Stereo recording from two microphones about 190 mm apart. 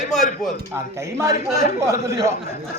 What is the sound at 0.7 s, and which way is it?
Speech, 15° right (ahead or behind).